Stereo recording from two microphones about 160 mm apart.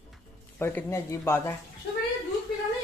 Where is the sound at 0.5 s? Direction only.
15° left (ahead or behind).